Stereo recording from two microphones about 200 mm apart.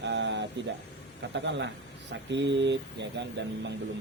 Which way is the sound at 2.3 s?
60° right (ahead or behind).